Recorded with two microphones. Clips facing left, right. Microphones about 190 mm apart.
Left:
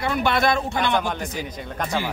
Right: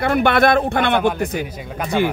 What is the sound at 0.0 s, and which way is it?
Speech, 60° right (ahead or behind).